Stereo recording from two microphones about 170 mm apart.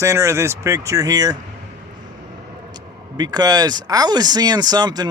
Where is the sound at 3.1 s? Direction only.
25° right (ahead or behind).